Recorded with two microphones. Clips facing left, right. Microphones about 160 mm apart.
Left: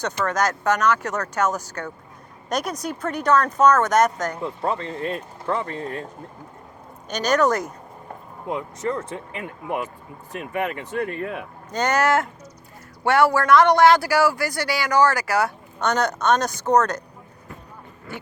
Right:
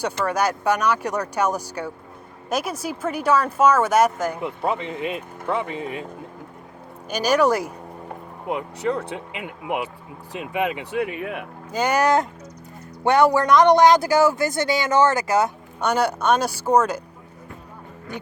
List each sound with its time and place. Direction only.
0.0 s speech: 10° right (ahead or behind)
7.1 s speech: 10° right (ahead or behind)
9.0 s speech: 70° right (ahead or behind)
9.3 s speech: 15° right (ahead or behind)
18.1 s speech: 20° right (ahead or behind)